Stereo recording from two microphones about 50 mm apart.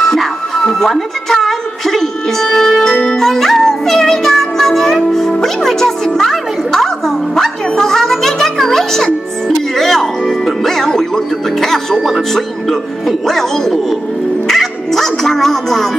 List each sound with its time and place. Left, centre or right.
0.0 s music: centre
13.3 s speech: centre
14.5 s music: centre